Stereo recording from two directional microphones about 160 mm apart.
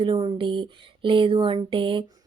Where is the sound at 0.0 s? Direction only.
30° right (ahead or behind).